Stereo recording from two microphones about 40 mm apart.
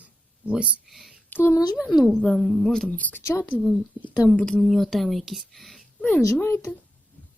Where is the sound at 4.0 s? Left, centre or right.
Right.